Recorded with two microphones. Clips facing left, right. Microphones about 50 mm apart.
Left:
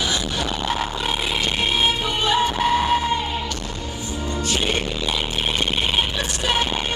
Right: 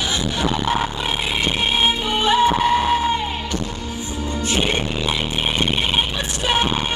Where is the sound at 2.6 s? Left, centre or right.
Centre.